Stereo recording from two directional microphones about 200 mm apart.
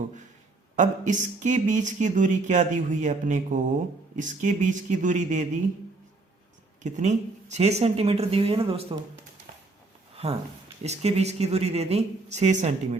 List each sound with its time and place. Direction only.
0.8 s speech: 40° right (ahead or behind)
6.8 s speech: 35° right (ahead or behind)
10.8 s speech: 35° right (ahead or behind)